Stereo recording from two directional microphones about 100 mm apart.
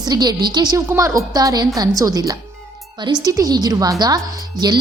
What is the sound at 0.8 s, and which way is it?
A woman's voice, 30° right (ahead or behind).